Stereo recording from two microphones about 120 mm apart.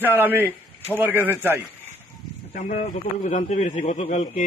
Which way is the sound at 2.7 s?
75° left (ahead or behind).